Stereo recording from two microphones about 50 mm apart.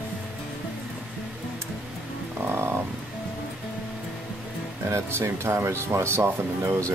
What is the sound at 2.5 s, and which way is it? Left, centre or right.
Frog, right.